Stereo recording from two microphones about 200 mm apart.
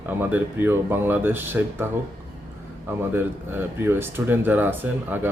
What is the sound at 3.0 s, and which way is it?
Speech, 10° right (ahead or behind).